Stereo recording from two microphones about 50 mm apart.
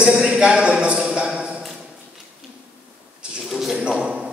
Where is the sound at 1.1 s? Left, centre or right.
Centre.